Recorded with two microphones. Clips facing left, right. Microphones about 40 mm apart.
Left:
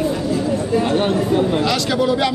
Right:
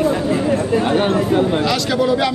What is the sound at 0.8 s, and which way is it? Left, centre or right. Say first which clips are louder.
Speech: right 1 dB; centre.